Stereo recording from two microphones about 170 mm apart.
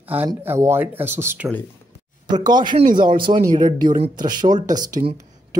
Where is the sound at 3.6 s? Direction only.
50° right (ahead or behind).